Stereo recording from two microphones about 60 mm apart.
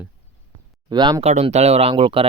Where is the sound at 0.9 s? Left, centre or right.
Right.